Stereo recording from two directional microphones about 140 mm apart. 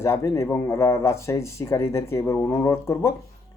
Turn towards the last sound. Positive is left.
turn(degrees=20)  # may be behind; listen again after turning